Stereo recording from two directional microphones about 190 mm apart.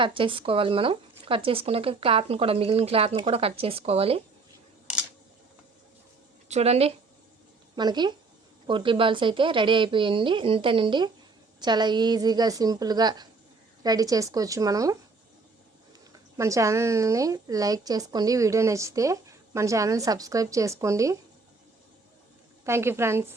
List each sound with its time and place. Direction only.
0.0 s speech: 25° right (ahead or behind)
6.5 s speech: 35° right (ahead or behind)
7.8 s a woman's voice: 20° right (ahead or behind)
16.1 s a woman's voice: 15° right (ahead or behind)
22.6 s a woman's voice: 15° right (ahead or behind)